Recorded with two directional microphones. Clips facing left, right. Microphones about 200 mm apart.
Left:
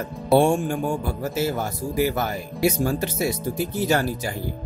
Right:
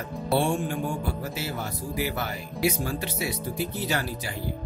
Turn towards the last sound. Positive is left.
turn(degrees=45)  # may be behind; listen again after turning